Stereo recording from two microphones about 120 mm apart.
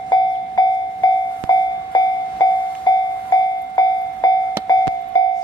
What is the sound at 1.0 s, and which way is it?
Train, 35° left (ahead or behind).